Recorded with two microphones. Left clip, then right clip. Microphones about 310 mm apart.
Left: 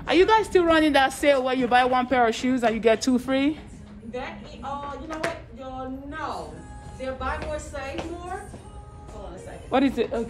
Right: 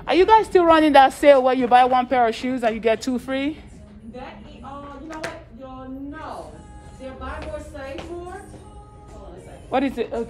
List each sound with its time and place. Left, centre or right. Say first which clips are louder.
0.0 s speech: right 4 dB; centre
7.7 s speech: left 1 dB; left
9.7 s speech: even; centre